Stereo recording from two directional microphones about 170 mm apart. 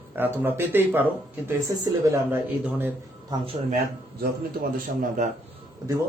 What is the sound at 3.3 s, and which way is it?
Speech, 25° right (ahead or behind).